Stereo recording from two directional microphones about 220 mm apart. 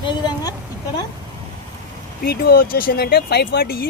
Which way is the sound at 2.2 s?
45° left (ahead or behind).